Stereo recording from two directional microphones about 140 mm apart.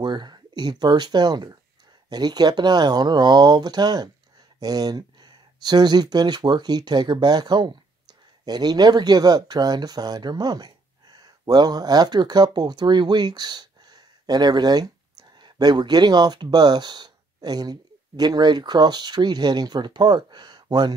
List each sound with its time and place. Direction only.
0.0 s speech: 30° right (ahead or behind)